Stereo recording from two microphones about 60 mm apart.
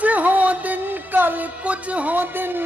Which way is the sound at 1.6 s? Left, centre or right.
Right.